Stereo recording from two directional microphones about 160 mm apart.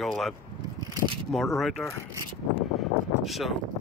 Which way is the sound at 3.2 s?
Centre (ahead or behind).